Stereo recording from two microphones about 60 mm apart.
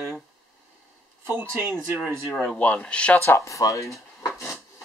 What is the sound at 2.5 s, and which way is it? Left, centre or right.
Speech, left.